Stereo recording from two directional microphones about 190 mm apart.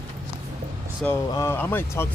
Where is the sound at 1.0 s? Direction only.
15° left (ahead or behind).